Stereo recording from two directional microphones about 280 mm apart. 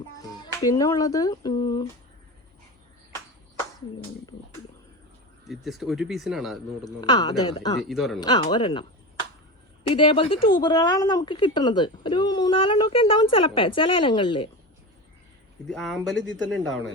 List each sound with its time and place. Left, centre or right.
0.2 s speech: centre
5.5 s speech: centre
6.8 s speech: centre
7.8 s speech: centre
8.2 s speech: centre
9.9 s speech: centre
15.6 s speech: centre
16.1 s speech: right